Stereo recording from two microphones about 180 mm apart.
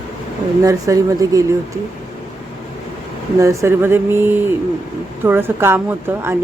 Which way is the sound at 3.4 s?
15° right (ahead or behind).